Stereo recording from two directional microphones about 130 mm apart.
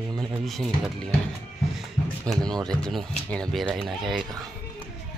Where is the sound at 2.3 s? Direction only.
5° left (ahead or behind).